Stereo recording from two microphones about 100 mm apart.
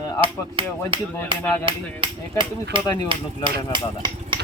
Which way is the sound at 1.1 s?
20° left (ahead or behind).